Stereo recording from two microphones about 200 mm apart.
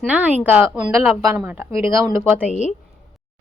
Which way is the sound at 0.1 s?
5° right (ahead or behind).